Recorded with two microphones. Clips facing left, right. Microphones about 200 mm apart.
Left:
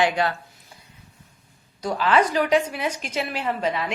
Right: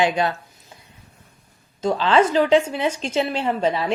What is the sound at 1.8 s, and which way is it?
A woman's voice, 25° right (ahead or behind).